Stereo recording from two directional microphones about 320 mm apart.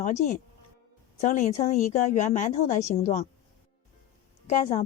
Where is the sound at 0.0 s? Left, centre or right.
Left.